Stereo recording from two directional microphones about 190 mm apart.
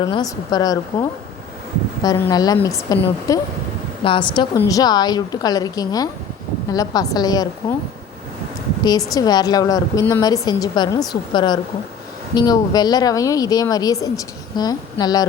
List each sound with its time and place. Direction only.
0.0 s speech: 20° left (ahead or behind)
2.0 s a woman's voice: 15° left (ahead or behind)
8.8 s a woman's voice: 20° left (ahead or behind)